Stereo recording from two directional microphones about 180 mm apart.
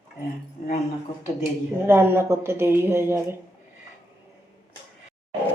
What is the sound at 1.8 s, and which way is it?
Speech, 15° right (ahead or behind).